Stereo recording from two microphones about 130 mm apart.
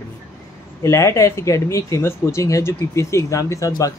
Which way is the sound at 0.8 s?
25° left (ahead or behind).